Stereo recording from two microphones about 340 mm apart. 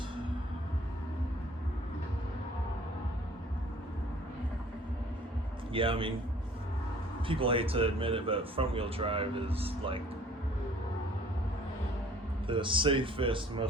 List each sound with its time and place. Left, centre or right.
5.7 s a man's voice: centre
7.3 s a man's voice: centre
12.5 s a man's voice: centre